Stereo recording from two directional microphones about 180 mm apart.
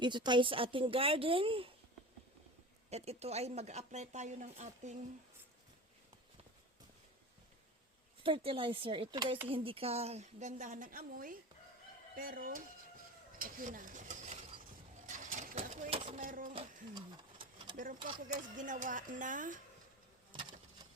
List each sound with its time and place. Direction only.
0.0 s a woman's voice: 25° right (ahead or behind)
2.9 s speech: 35° right (ahead or behind)
8.2 s a woman's voice: 30° right (ahead or behind)
15.0 s vehicle: 45° right (ahead or behind)
15.6 s speech: 40° right (ahead or behind)
16.6 s a sound: 25° right (ahead or behind)
17.7 s speech: 45° right (ahead or behind)
20.3 s a sound: 25° right (ahead or behind)